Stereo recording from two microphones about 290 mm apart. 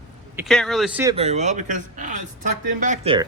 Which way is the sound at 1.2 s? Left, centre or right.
Right.